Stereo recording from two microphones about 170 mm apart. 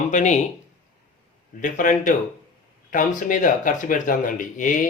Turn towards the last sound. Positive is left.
turn(degrees=50)  # may be behind; listen again after turning